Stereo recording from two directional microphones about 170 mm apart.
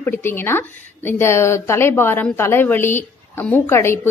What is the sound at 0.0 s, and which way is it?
A woman's voice, 15° left (ahead or behind).